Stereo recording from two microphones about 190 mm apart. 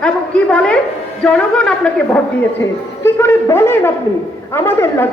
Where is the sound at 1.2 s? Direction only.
5° left (ahead or behind).